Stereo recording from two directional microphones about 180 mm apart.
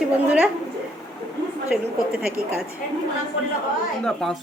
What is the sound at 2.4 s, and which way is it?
Speech, 55° right (ahead or behind).